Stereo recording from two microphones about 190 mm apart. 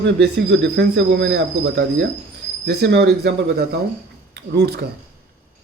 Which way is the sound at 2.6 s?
60° right (ahead or behind).